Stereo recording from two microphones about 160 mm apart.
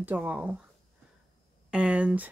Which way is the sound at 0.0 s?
10° right (ahead or behind).